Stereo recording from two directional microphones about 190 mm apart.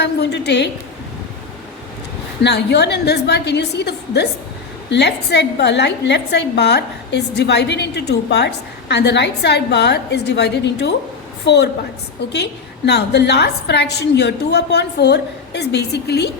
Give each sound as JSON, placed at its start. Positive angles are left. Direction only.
{"t": 0.0, "sound": "a woman's voice", "side_deg": 60}
{"t": 2.4, "sound": "a woman's voice", "side_deg": 65}